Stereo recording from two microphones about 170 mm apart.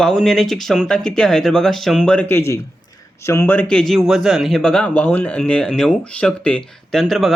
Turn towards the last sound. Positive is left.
turn(degrees=0)  # may be behind; listen again after turning